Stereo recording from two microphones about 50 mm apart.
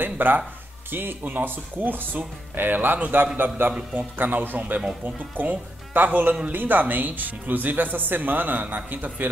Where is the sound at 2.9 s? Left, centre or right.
Right.